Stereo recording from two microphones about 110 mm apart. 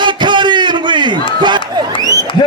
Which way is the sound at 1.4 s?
40° right (ahead or behind).